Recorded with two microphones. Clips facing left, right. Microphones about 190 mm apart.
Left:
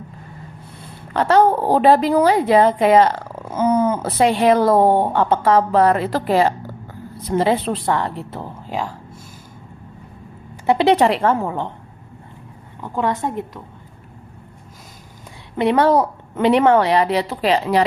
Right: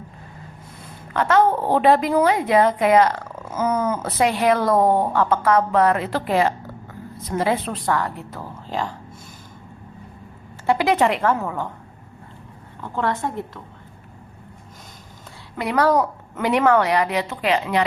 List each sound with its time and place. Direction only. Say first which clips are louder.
1.1 s a woman's voice: left 3 dB; 30° left (ahead or behind)
8.4 s a woman's voice: right 1 dB; 10° left (ahead or behind)
10.7 s a woman's voice: left 4 dB; 30° left (ahead or behind)
12.8 s a woman's voice: left 3 dB; 15° left (ahead or behind)
15.5 s a woman's voice: left 4 dB; 25° left (ahead or behind)